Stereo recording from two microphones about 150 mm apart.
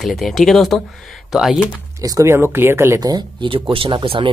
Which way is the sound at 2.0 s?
20° right (ahead or behind).